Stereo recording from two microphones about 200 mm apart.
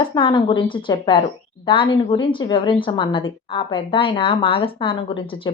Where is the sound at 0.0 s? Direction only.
25° left (ahead or behind).